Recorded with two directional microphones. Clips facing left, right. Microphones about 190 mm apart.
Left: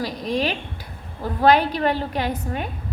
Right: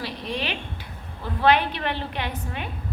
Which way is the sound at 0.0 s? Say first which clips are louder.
Left 6 dB; 40° left (ahead or behind).